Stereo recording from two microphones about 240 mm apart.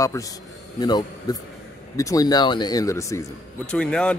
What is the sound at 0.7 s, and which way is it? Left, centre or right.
Speech, centre.